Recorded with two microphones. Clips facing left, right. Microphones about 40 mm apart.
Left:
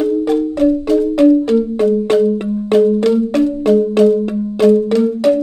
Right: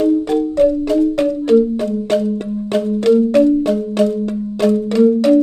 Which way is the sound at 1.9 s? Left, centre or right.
Centre.